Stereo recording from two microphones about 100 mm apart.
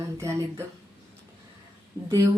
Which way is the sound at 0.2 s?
30° right (ahead or behind).